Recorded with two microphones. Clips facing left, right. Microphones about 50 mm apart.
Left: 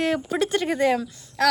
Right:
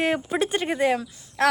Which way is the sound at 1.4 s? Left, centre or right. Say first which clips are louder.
Even; right.